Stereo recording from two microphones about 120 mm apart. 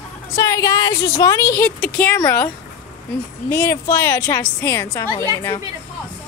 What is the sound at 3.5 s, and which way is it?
A woman's voice, 25° left (ahead or behind).